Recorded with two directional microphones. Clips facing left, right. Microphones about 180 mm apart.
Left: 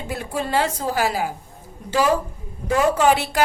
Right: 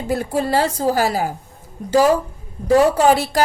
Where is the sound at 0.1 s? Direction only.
40° right (ahead or behind).